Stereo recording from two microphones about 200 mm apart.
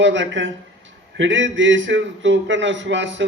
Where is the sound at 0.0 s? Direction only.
65° right (ahead or behind).